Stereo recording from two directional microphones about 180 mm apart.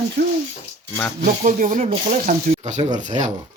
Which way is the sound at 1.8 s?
35° right (ahead or behind).